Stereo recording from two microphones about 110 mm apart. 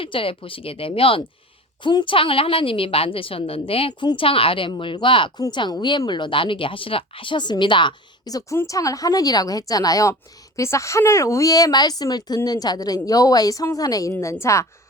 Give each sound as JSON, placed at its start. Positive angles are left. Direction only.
{"t": 0.0, "sound": "a woman's voice", "side_deg": 55}
{"t": 1.8, "sound": "a woman's voice", "side_deg": 45}
{"t": 8.3, "sound": "speech", "side_deg": 35}